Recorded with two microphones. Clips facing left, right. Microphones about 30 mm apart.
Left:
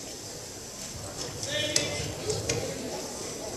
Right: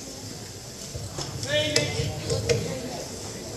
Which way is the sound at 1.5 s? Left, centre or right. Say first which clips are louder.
Right 5 dB; right.